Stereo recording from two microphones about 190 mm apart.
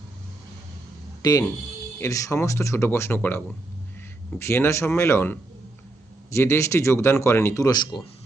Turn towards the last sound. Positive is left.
turn(degrees=20)  # may be behind; listen again after turning